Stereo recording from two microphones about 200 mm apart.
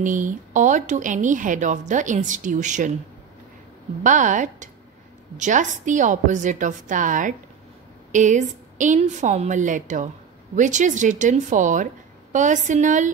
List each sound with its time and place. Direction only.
0.0 s a woman's voice: 40° right (ahead or behind)
4.0 s a woman's voice: 40° right (ahead or behind)